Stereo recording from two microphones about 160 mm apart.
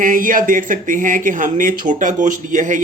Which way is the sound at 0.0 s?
60° right (ahead or behind).